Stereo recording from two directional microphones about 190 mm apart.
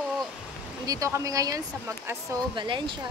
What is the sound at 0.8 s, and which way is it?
Speech, 15° right (ahead or behind).